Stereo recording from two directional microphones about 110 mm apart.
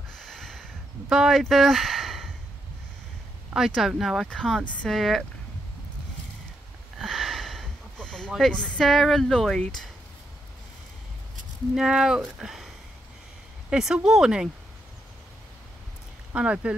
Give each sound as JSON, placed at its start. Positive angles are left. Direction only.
{"t": 0.2, "sound": "a sound", "side_deg": 5}
{"t": 1.1, "sound": "speech", "side_deg": 0}
{"t": 3.5, "sound": "speech", "side_deg": -5}
{"t": 7.0, "sound": "sniff", "side_deg": 0}
{"t": 8.3, "sound": "speech", "side_deg": 5}
{"t": 11.7, "sound": "speech", "side_deg": -5}
{"t": 16.3, "sound": "speech", "side_deg": -10}